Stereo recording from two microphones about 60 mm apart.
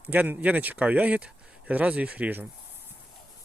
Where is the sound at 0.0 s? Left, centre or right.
Right.